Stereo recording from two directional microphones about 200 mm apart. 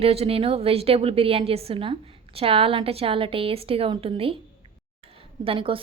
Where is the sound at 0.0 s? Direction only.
30° right (ahead or behind).